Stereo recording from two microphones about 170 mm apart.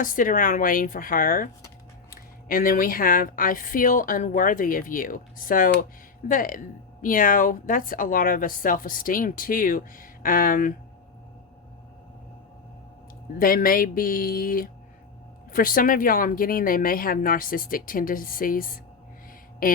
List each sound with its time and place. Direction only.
0.0 s a woman's voice: 55° left (ahead or behind)
13.4 s a woman's voice: 55° left (ahead or behind)